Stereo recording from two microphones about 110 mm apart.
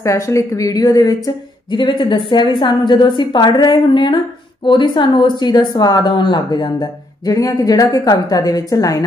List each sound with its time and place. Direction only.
0.0 s a woman's voice: 30° left (ahead or behind)